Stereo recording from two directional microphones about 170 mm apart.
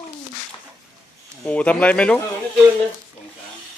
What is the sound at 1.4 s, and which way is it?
Speech, 5° left (ahead or behind).